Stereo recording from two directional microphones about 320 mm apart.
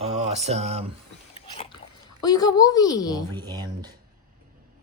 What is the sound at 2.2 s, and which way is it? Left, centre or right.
A woman's voice, centre.